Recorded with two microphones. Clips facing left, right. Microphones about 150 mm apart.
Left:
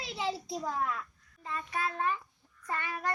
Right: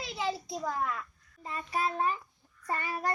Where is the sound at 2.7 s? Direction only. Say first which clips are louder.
Right 2 dB; 35° right (ahead or behind).